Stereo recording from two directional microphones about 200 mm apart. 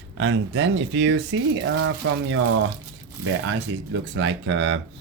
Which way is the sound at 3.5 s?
70° right (ahead or behind).